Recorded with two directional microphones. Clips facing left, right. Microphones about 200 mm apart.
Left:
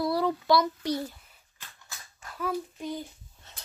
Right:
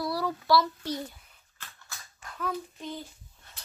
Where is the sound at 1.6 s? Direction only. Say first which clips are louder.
Right 1 dB; 10° left (ahead or behind).